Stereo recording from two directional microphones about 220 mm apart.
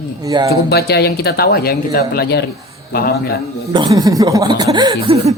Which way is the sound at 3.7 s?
20° right (ahead or behind).